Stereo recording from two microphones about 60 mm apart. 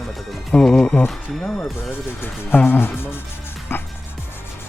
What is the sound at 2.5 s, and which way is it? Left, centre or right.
Speech, left.